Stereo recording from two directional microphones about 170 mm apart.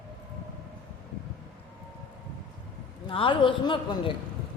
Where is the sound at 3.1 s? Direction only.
30° left (ahead or behind).